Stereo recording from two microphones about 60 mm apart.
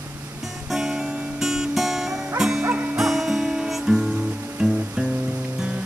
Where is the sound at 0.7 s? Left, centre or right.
Centre.